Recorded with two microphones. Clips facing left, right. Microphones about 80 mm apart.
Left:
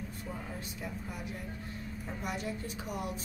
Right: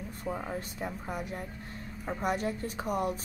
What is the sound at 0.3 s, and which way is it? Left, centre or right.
A woman's voice, right.